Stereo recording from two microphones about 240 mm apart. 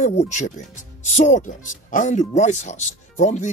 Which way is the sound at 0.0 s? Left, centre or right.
Left.